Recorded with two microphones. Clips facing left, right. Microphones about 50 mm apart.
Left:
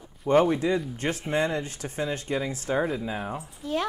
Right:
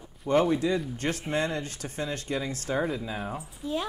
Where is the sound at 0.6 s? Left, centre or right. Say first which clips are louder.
Left 1 dB; left; by 3.1 s centre.